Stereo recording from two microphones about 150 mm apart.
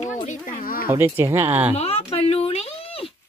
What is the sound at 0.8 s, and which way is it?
Speech, 15° right (ahead or behind).